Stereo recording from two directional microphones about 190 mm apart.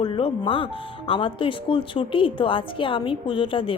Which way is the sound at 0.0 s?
30° left (ahead or behind).